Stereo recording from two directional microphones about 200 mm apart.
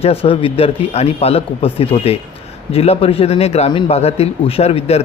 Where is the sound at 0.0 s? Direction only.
30° left (ahead or behind).